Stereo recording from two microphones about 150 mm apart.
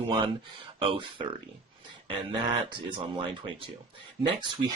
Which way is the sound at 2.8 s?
35° right (ahead or behind).